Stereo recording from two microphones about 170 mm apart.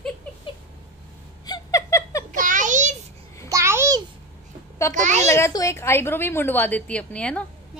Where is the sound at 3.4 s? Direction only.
15° right (ahead or behind).